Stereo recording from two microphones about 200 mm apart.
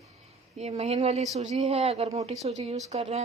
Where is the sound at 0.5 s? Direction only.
30° right (ahead or behind).